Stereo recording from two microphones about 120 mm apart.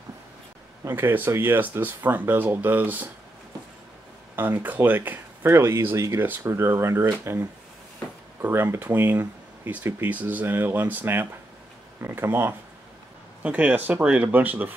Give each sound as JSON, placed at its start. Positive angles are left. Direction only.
{"t": 0.8, "sound": "speech", "side_deg": -20}
{"t": 4.4, "sound": "speech", "side_deg": -15}